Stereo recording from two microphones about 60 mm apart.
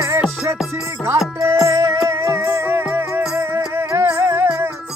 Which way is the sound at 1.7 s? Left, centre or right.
Right.